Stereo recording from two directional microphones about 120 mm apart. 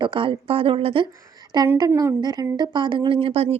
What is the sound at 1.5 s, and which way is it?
Speech, 35° right (ahead or behind).